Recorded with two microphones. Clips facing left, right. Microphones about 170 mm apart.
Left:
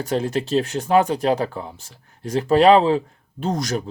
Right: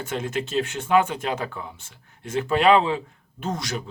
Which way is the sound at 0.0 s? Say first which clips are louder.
Left 5 dB; 35° left (ahead or behind).